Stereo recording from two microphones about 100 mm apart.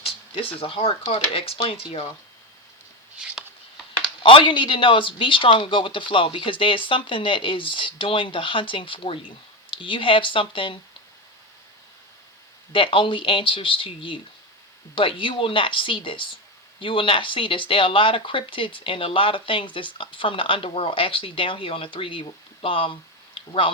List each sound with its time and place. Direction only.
0.3 s speech: 70° left (ahead or behind)
3.2 s a sound: 10° right (ahead or behind)
4.0 s speech: 60° left (ahead or behind)
12.7 s speech: 60° left (ahead or behind)